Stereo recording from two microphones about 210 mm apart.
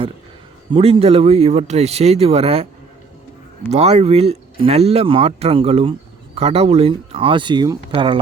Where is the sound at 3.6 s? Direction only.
30° right (ahead or behind).